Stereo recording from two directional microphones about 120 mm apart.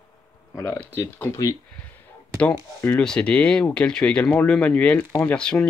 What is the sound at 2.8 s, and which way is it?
Speech, 10° left (ahead or behind).